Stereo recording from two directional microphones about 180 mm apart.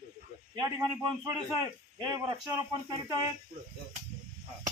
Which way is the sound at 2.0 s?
20° right (ahead or behind).